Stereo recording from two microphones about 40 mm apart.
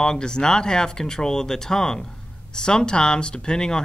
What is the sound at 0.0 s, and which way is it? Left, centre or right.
Speech, centre.